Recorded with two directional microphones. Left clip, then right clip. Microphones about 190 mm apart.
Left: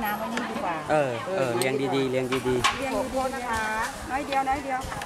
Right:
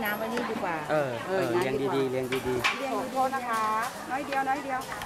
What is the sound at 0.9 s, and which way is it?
Speech, 30° left (ahead or behind).